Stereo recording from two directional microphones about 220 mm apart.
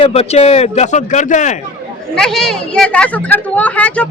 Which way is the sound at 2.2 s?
Centre (ahead or behind).